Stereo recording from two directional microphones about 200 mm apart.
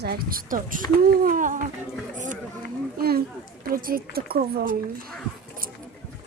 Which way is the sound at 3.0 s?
50° right (ahead or behind).